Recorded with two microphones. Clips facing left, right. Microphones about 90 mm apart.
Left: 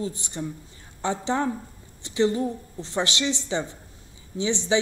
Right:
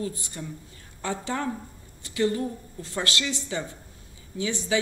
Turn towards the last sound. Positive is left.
turn(degrees=20)  # may be behind; listen again after turning